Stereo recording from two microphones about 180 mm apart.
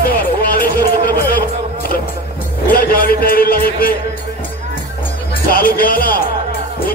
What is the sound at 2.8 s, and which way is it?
Speech, 55° left (ahead or behind).